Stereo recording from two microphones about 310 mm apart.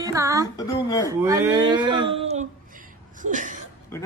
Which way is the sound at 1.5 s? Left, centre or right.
Centre.